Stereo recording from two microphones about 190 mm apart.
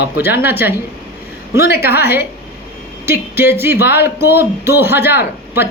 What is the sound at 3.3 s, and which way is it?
Speech, 10° right (ahead or behind).